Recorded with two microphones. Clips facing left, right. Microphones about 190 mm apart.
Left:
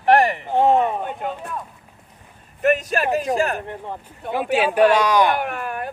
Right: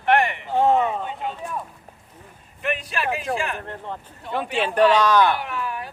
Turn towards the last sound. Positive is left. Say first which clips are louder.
# left 3 dB
turn(degrees=55)  # may be behind; listen again after turning